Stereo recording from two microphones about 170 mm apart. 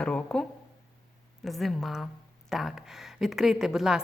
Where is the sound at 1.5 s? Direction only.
Centre (ahead or behind).